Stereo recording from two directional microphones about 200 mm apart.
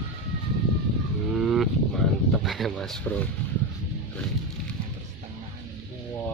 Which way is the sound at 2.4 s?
Centre (ahead or behind).